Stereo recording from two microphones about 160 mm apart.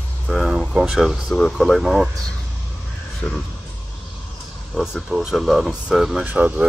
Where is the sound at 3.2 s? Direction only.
Centre (ahead or behind).